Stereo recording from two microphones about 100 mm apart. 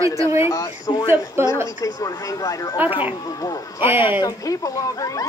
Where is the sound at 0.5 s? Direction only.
35° left (ahead or behind).